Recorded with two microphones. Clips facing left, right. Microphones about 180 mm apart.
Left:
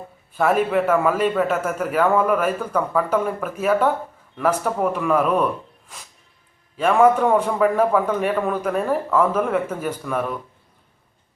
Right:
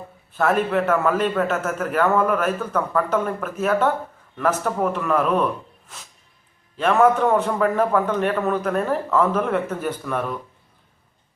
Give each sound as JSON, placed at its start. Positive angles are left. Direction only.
{"t": 0.3, "sound": "a man's voice", "side_deg": 5}
{"t": 6.7, "sound": "a man's voice", "side_deg": 10}